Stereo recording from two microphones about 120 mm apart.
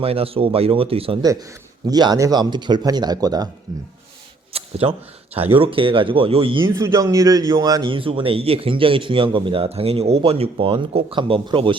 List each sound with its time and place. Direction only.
0.0 s a man's voice: 55° right (ahead or behind)
1.2 s a man's voice: 30° right (ahead or behind)
4.5 s a man's voice: 55° right (ahead or behind)
6.7 s a man's voice: 30° right (ahead or behind)
7.9 s a man's voice: 45° right (ahead or behind)